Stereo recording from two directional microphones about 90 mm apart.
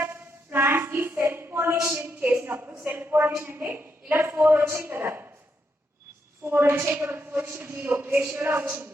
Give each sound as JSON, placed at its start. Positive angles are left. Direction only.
{"t": 0.0, "sound": "a sound", "side_deg": -25}
{"t": 1.7, "sound": "a woman's voice", "side_deg": -30}
{"t": 6.4, "sound": "a woman's voice", "side_deg": -25}